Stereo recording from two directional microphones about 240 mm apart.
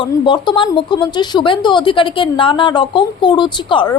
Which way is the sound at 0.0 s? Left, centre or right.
Centre.